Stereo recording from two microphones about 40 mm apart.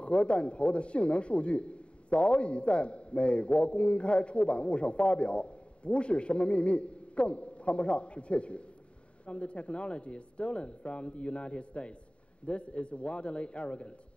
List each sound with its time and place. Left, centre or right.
0.0 s a man's voice: left